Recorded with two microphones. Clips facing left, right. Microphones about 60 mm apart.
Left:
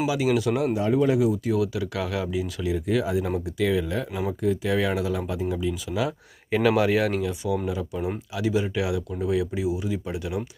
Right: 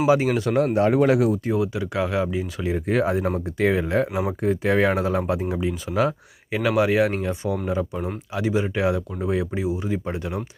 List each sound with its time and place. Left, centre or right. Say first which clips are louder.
0.1 s speech: right 4 dB; right
1.5 s speech: right 2 dB; right
5.9 s speech: right 6 dB; right
6.5 s speech: even; centre
7.2 s speech: right 1 dB; right